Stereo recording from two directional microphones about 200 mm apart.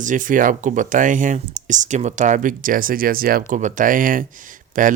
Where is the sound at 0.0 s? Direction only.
40° right (ahead or behind).